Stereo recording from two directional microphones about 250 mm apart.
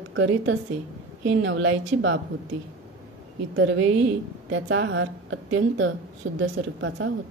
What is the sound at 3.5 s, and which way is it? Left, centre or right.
A woman's voice, right.